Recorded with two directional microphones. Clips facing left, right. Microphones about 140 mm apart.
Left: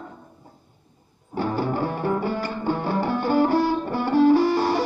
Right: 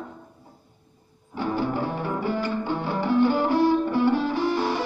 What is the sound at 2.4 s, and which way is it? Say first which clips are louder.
Music: left 1 dB; 40° left (ahead or behind).